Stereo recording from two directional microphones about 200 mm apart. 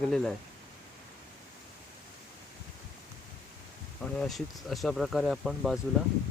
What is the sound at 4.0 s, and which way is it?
Speech, centre (ahead or behind).